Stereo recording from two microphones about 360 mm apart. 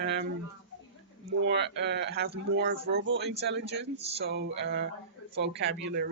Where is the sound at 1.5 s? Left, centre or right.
Right.